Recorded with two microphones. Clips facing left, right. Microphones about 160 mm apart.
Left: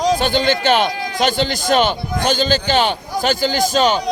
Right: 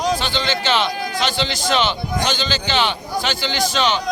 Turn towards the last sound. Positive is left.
turn(degrees=45)  # may be behind; listen again after turning